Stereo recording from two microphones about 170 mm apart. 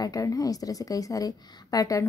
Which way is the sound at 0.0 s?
20° left (ahead or behind).